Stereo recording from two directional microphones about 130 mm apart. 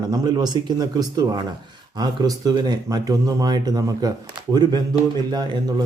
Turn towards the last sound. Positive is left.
turn(degrees=-30)  # may be behind; listen again after turning